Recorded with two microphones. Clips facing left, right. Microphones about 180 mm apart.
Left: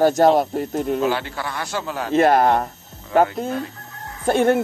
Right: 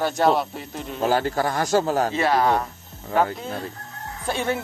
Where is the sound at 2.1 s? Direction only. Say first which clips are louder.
Left 10 dB; 50° left (ahead or behind).